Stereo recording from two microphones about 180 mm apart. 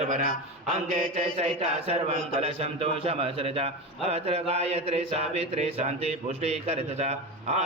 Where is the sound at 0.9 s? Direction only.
35° right (ahead or behind).